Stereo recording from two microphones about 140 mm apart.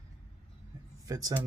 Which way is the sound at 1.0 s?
25° right (ahead or behind).